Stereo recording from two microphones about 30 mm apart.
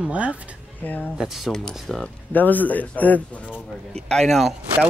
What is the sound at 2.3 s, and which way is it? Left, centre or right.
A man's voice, left.